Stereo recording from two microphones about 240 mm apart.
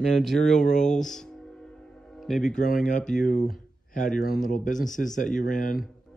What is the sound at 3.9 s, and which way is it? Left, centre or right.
Speech, left.